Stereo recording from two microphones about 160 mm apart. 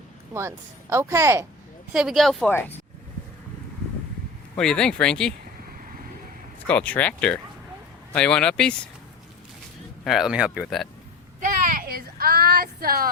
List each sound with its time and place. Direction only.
0.3 s speech: 15° right (ahead or behind)
1.9 s speech: 5° right (ahead or behind)
2.5 s speech: 15° left (ahead or behind)
4.5 s speech: 5° left (ahead or behind)
6.7 s speech: 10° left (ahead or behind)
10.0 s speech: centre (ahead or behind)
11.3 s a sound: 55° right (ahead or behind)